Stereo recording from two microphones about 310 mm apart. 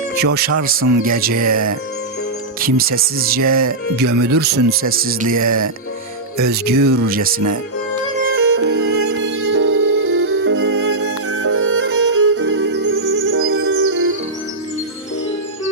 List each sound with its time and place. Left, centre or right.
0.5 s speech: right
2.6 s speech: right
5.4 s speech: right
6.3 s speech: right
8.3 s music: right
11.3 s music: right